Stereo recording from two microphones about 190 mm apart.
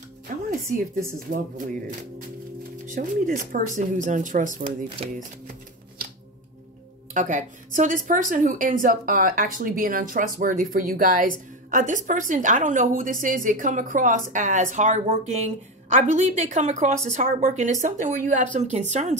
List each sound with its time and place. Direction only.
1.3 s speech: 45° right (ahead or behind)
4.8 s speech: 30° right (ahead or behind)
7.2 s a woman's voice: 40° right (ahead or behind)